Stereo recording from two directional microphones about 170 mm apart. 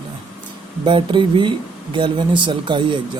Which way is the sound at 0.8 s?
30° right (ahead or behind).